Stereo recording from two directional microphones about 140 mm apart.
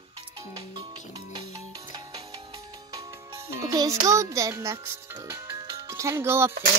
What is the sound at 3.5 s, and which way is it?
A child's voice, 25° right (ahead or behind).